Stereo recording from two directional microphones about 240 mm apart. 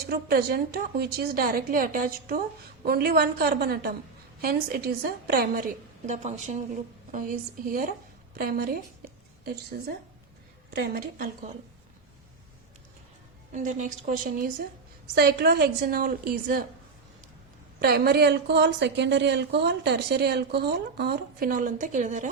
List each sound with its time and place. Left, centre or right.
0.1 s a woman's voice: right
13.5 s a woman's voice: right
17.7 s a woman's voice: right